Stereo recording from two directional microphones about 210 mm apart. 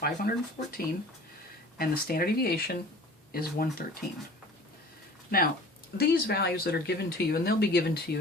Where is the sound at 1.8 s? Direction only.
45° left (ahead or behind).